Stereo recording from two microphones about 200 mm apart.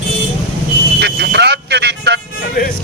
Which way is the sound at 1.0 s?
55° right (ahead or behind).